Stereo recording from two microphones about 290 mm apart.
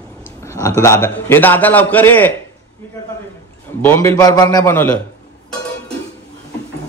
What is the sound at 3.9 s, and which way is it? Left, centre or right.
A man's voice, centre.